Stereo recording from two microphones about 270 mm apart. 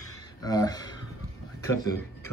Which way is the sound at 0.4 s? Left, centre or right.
Centre.